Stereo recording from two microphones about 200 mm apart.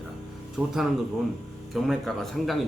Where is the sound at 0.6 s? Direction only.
5° right (ahead or behind).